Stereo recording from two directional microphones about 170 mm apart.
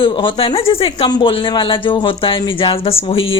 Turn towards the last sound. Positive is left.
turn(degrees=35)  # may be behind; listen again after turning